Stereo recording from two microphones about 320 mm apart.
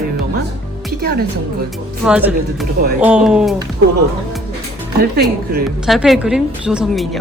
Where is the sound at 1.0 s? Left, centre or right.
Right.